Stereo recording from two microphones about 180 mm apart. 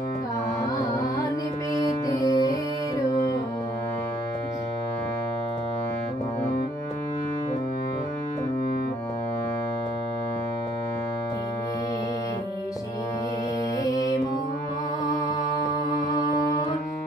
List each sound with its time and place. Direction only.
2.1 s music: 20° left (ahead or behind)
13.8 s music: 20° left (ahead or behind)